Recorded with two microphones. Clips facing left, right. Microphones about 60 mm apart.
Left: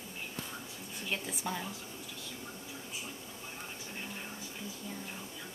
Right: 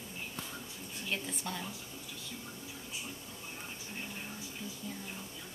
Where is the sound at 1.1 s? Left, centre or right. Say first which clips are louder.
Left 2 dB; centre.